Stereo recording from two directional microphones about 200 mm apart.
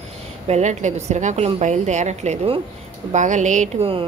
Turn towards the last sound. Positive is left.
turn(degrees=-30)  # may be behind; listen again after turning